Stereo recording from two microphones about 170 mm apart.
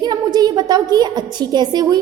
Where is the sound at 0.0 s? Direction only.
25° right (ahead or behind).